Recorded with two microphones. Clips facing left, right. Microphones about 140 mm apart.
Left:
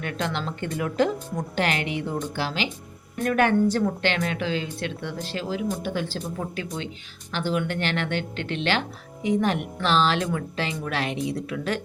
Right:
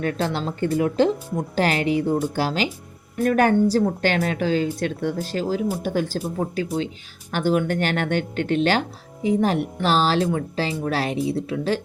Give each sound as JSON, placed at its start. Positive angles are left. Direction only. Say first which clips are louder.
{"t": 0.0, "sound": "a woman's voice", "louder": "right 5 dB", "side_deg": -35}